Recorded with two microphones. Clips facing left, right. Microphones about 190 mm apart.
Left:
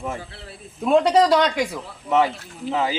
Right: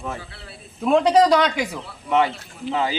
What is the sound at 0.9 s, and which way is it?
Speech, centre (ahead or behind).